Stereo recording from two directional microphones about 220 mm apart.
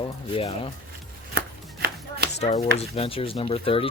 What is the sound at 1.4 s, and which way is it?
Chopping, 45° right (ahead or behind).